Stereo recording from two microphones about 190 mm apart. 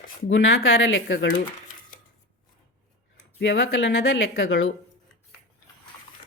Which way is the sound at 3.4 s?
85° left.